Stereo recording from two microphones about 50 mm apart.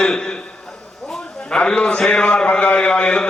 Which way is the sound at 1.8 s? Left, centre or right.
Left.